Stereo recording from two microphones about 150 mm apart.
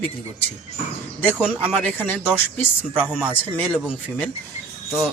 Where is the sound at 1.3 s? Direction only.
5° right (ahead or behind).